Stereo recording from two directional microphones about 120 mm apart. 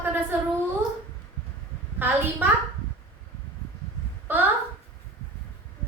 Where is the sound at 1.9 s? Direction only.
15° right (ahead or behind).